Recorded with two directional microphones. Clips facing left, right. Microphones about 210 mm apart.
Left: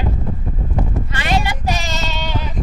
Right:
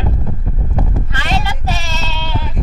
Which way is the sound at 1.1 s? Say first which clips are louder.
Left 1 dB; 15° left (ahead or behind).